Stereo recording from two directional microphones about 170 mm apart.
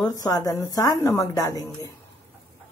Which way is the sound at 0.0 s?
20° left (ahead or behind).